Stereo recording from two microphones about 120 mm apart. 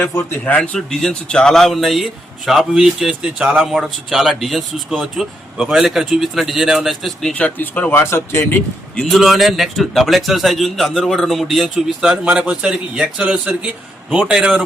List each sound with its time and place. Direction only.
0.0 s a man's voice: 15° left (ahead or behind)
9.0 s a man's voice: centre (ahead or behind)